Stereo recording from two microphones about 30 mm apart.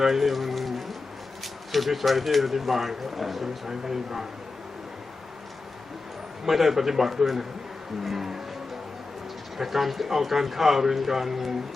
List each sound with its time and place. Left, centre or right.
0.0 s speech: centre
3.7 s a man's voice: centre
6.4 s a man's voice: centre
9.6 s a man's voice: centre